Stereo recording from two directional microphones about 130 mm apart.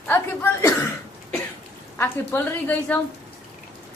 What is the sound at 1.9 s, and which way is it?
Speech, 15° left (ahead or behind).